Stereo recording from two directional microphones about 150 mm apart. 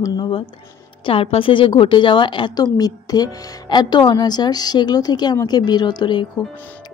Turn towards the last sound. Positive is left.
turn(degrees=30)  # may be behind; listen again after turning